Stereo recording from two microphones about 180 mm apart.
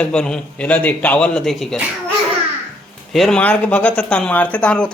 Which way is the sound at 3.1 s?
Centre (ahead or behind).